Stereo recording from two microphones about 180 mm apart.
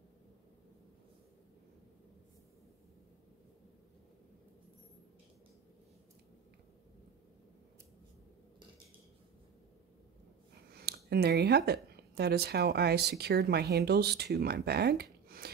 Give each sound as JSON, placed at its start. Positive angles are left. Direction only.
{"t": 10.8, "sound": "speech", "side_deg": -60}